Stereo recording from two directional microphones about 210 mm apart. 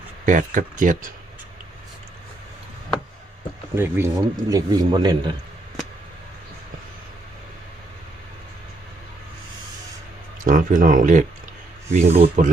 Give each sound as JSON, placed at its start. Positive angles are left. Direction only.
{"t": 0.3, "sound": "speech", "side_deg": -40}
{"t": 3.8, "sound": "a man's voice", "side_deg": -10}
{"t": 10.4, "sound": "speech", "side_deg": -40}